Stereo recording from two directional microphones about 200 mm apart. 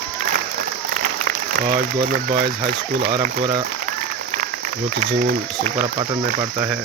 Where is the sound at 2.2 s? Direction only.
45° right (ahead or behind).